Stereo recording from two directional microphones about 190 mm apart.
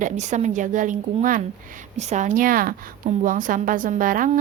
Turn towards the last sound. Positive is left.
turn(degrees=-45)  # may be behind; listen again after turning